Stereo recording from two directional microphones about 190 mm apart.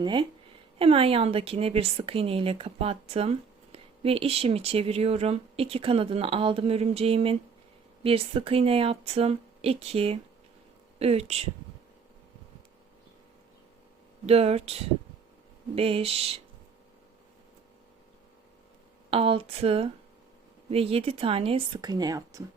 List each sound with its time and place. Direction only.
0.0 s a woman's voice: 25° right (ahead or behind)
14.3 s a woman's voice: 35° right (ahead or behind)
19.1 s speech: 30° right (ahead or behind)